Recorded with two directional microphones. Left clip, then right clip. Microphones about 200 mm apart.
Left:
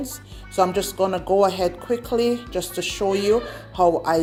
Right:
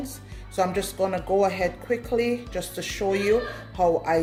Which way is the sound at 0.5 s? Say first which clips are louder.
Left 5 dB; 30° left (ahead or behind).